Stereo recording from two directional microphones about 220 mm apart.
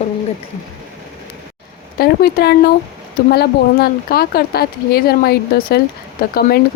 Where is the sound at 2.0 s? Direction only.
45° left (ahead or behind).